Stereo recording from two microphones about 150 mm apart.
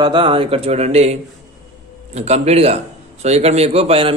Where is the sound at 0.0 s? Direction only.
35° right (ahead or behind).